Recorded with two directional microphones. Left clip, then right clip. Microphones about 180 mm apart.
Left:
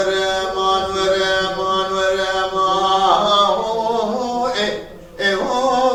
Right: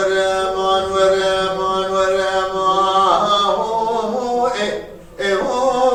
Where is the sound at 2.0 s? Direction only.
15° left (ahead or behind).